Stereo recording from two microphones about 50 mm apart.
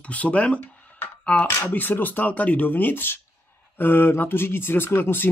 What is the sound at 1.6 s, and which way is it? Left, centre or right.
Speech, left.